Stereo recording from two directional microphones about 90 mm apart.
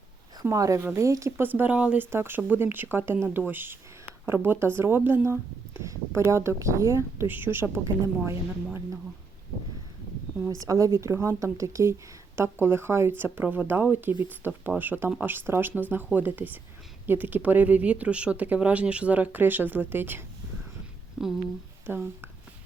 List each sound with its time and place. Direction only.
0.4 s speech: 35° right (ahead or behind)
1.4 s speech: 20° right (ahead or behind)
2.0 s speech: 25° right (ahead or behind)
10.6 s speech: 40° right (ahead or behind); by 20.2 s 20° right (ahead or behind)
21.2 s speech: 5° right (ahead or behind)
21.8 s speech: 25° right (ahead or behind)